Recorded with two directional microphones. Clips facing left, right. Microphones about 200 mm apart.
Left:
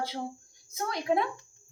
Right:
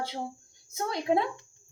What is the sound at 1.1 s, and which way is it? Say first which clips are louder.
Speech: right 1 dB; 20° right (ahead or behind).